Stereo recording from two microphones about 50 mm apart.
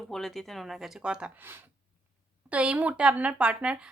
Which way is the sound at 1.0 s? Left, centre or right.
Centre.